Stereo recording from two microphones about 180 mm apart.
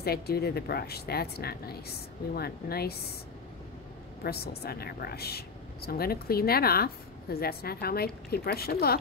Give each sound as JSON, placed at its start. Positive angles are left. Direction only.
{"t": 0.0, "sound": "speech", "side_deg": 60}
{"t": 4.2, "sound": "speech", "side_deg": 60}